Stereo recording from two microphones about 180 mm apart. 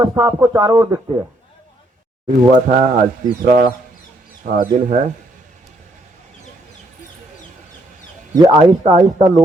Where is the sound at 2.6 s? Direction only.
40° right (ahead or behind).